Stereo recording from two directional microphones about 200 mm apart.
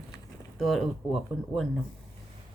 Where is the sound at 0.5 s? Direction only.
Centre (ahead or behind).